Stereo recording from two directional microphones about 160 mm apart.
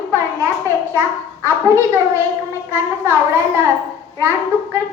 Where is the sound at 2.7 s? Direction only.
15° right (ahead or behind).